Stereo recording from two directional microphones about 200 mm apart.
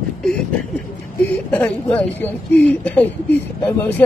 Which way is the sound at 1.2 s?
5° left (ahead or behind).